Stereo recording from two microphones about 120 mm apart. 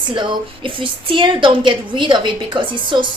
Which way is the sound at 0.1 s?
45° right (ahead or behind).